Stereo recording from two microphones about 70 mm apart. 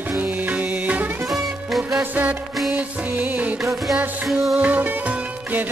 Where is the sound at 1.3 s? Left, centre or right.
Centre.